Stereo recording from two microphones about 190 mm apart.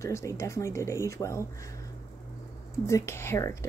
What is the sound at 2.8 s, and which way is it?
Speech, 15° left (ahead or behind).